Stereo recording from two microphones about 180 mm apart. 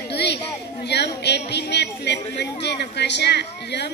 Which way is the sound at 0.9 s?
70° left (ahead or behind).